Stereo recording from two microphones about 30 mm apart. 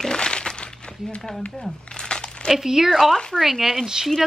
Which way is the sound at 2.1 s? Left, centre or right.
Left.